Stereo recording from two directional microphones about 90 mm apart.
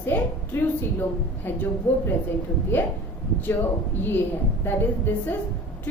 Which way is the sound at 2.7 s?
25° left (ahead or behind).